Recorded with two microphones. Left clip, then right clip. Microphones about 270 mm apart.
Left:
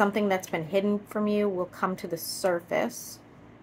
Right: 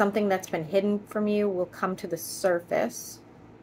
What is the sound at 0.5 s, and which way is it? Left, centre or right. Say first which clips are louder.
A woman's voice: right 1 dB; centre.